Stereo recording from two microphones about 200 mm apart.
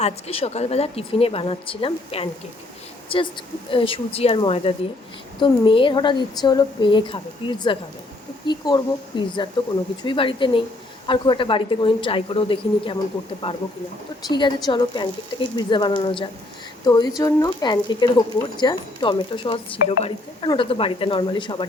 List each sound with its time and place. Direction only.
0.0 s speech: 30° left (ahead or behind)
14.3 s speech: 25° left (ahead or behind)